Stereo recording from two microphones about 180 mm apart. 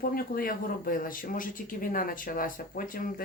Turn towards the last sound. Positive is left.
turn(degrees=50)  # may be behind; listen again after turning